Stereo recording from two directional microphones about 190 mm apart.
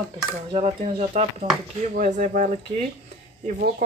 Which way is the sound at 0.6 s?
35° right (ahead or behind).